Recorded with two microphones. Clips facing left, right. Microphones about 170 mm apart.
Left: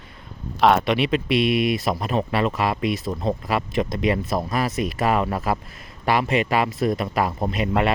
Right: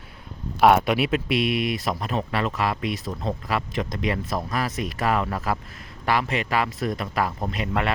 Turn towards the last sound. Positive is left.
turn(degrees=20)  # may be behind; listen again after turning